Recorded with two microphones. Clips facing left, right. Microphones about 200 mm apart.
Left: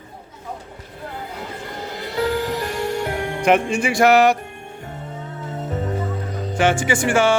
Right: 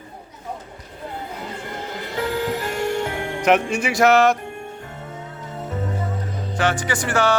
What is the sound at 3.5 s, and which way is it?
Music, 5° right (ahead or behind).